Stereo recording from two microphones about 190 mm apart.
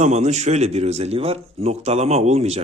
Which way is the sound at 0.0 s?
35° right (ahead or behind).